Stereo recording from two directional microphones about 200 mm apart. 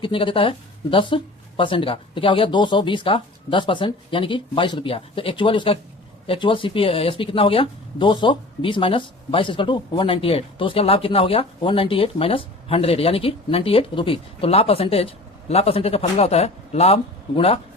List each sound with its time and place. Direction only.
0.0 s speech: 25° left (ahead or behind)